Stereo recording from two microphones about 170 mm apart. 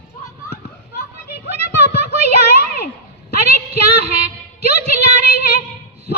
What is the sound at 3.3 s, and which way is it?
Child singing, 40° right (ahead or behind).